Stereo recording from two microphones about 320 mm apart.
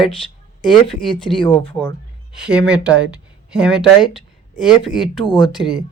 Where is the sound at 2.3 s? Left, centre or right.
Centre.